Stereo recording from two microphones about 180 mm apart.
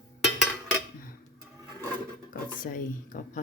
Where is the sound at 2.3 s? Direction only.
50° left (ahead or behind).